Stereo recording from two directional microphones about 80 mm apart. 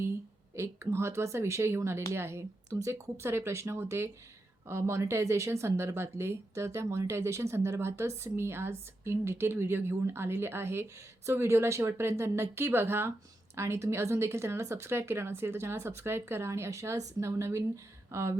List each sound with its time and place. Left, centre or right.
0.5 s speech: right